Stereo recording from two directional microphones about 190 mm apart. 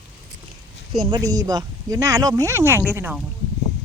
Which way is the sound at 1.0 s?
20° right (ahead or behind).